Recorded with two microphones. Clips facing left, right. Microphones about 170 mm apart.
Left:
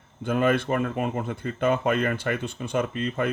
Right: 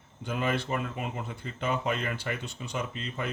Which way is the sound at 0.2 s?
55° left (ahead or behind).